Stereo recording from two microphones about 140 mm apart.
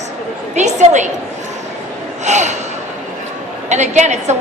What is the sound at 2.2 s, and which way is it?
Speech, 55° right (ahead or behind).